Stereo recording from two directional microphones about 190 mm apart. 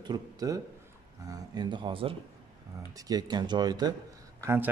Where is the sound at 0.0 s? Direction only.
20° right (ahead or behind).